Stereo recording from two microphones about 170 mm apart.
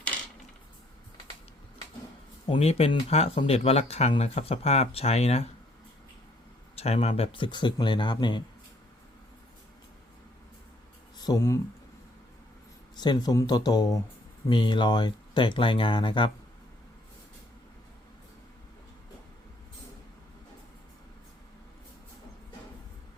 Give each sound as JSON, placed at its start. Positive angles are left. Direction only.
{"t": 2.5, "sound": "speech", "side_deg": 35}
{"t": 6.7, "sound": "speech", "side_deg": 35}
{"t": 11.2, "sound": "speech", "side_deg": 20}
{"t": 13.0, "sound": "speech", "side_deg": 25}